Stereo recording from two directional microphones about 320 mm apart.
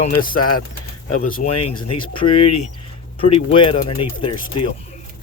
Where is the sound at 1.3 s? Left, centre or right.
Left.